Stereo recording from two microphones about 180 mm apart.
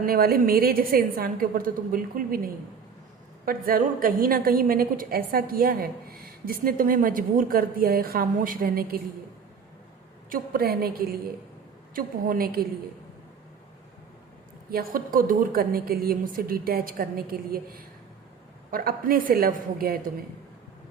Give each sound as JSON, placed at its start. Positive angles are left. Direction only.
{"t": 0.0, "sound": "a woman's voice", "side_deg": -55}
{"t": 10.2, "sound": "a woman's voice", "side_deg": -55}
{"t": 14.7, "sound": "a woman's voice", "side_deg": -55}